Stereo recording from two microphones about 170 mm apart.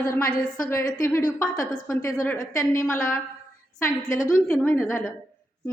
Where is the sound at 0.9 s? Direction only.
50° left (ahead or behind).